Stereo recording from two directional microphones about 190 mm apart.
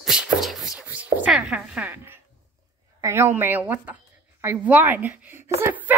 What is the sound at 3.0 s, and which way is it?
A woman's voice, 15° right (ahead or behind).